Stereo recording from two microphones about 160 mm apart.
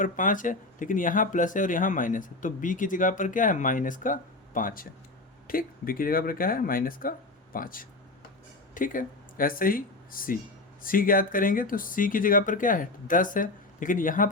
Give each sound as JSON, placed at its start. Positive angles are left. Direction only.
{"t": 0.0, "sound": "speech", "side_deg": 55}